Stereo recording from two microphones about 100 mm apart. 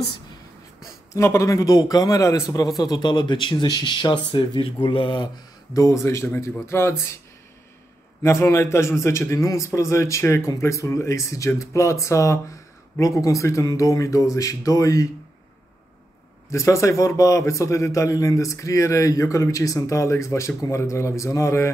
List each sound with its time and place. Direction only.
1.1 s a man's voice: 30° left (ahead or behind)
2.8 s speech: 45° left (ahead or behind)
5.8 s a man's voice: 30° left (ahead or behind)
8.2 s a man's voice: 30° left (ahead or behind)
16.4 s a man's voice: 30° left (ahead or behind)